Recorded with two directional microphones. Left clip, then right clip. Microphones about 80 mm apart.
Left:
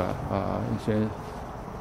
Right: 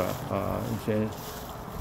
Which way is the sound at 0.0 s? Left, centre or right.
Centre.